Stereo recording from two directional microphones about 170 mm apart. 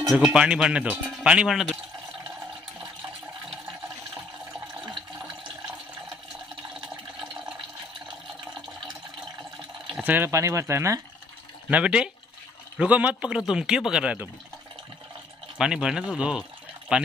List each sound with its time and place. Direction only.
0.0 s speech: 5° right (ahead or behind)
9.8 s speech: 5° right (ahead or behind)
15.5 s speech: 5° right (ahead or behind)